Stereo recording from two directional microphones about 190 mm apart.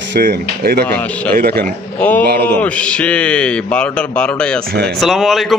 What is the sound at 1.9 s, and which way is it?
A man's voice, 10° left (ahead or behind).